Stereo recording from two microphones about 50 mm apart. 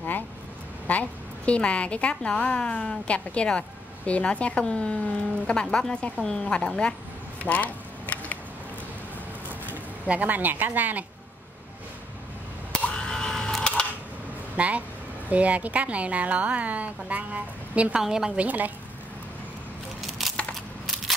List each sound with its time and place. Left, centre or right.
0.8 s speech: left
7.4 s a sound: left
10.0 s speech: right
12.8 s camera: centre
14.6 s a woman's voice: right
17.9 s a woman's voice: centre
18.3 s speech: right
20.0 s a sound: centre